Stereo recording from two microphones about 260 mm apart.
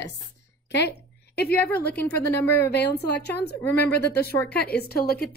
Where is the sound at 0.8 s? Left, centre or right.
Left.